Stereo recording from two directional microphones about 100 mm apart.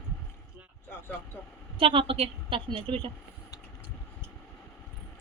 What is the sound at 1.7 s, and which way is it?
A woman's voice, 60° right (ahead or behind).